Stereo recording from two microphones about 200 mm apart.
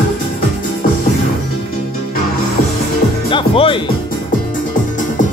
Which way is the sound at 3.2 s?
25° left (ahead or behind).